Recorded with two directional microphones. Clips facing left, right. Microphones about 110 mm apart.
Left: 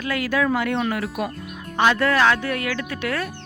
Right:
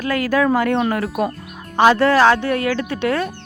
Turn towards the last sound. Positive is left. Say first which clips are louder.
# right 6 dB
turn(degrees=-30)  # may be behind; listen again after turning